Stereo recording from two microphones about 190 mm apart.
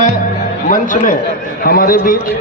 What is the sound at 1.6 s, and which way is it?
Speech, 50° left (ahead or behind).